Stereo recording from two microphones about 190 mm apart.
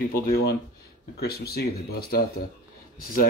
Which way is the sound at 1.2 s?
55° left (ahead or behind).